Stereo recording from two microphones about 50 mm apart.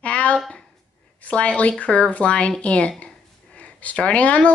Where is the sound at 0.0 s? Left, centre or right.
Left.